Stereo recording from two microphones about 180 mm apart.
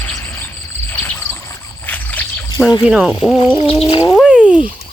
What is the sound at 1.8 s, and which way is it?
Rowboat, 10° left (ahead or behind).